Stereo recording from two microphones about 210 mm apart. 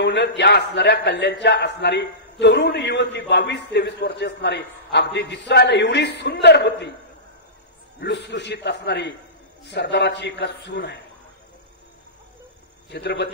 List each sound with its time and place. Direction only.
0.0 s a sound: 55° left (ahead or behind)
0.4 s a man's voice: 55° left (ahead or behind)
8.0 s a man's voice: 55° left (ahead or behind)
12.9 s a man's voice: 55° left (ahead or behind)